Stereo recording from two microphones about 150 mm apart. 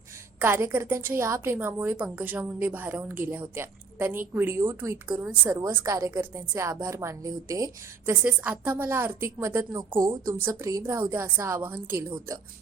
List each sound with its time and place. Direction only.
0.3 s a woman's voice: 15° right (ahead or behind)
8.1 s a woman's voice: 10° right (ahead or behind)